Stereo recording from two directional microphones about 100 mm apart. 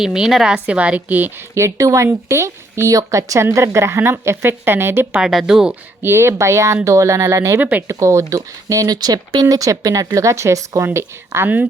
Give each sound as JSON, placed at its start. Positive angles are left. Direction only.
{"t": 0.0, "sound": "a woman's voice", "side_deg": -5}
{"t": 1.5, "sound": "speech", "side_deg": -30}
{"t": 5.1, "sound": "speech", "side_deg": -5}
{"t": 6.0, "sound": "speech", "side_deg": -25}
{"t": 7.6, "sound": "a woman's voice", "side_deg": -15}
{"t": 7.9, "sound": "speech", "side_deg": -30}